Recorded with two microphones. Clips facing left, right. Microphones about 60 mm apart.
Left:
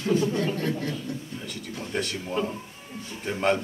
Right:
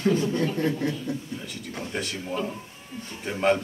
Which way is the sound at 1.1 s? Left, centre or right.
Centre.